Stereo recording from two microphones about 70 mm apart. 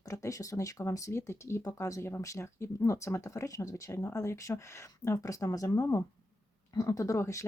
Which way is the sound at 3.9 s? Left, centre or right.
Left.